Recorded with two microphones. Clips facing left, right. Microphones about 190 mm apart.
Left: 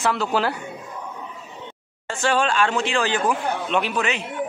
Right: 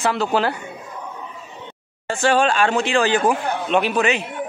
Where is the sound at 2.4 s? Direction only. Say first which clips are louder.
Right 3 dB; 50° right (ahead or behind).